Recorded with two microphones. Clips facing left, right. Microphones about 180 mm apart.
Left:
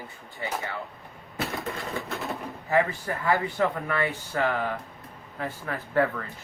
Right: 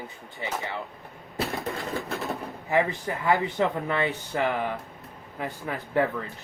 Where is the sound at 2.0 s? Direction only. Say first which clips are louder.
Right 1 dB; centre (ahead or behind).